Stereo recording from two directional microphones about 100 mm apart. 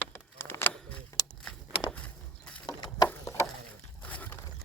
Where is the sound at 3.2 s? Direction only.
30° left (ahead or behind).